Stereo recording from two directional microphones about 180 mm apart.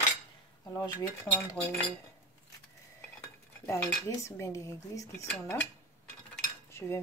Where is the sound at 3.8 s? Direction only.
5° left (ahead or behind).